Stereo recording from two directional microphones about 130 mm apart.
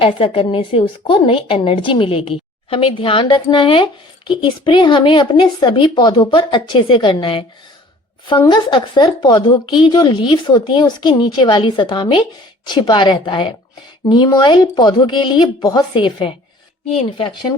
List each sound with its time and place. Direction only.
0.0 s a woman's voice: 45° left (ahead or behind)